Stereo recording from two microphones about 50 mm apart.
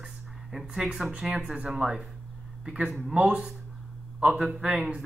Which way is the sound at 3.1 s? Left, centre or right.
Centre.